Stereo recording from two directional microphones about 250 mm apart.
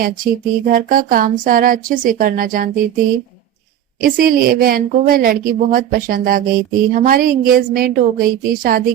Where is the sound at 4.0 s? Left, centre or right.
Right.